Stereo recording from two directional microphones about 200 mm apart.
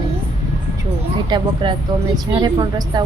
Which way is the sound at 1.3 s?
25° right (ahead or behind).